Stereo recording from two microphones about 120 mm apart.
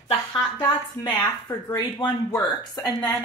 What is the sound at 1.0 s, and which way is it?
A woman's voice, 40° left (ahead or behind).